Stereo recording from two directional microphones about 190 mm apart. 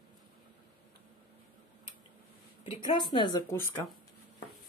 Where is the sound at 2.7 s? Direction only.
25° left (ahead or behind).